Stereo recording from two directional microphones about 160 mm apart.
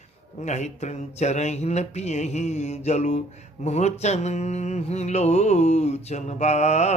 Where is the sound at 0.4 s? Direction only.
45° left (ahead or behind).